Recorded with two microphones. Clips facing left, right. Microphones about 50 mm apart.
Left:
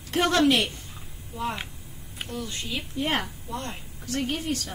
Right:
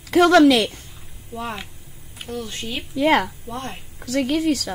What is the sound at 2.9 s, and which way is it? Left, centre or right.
Speech, right.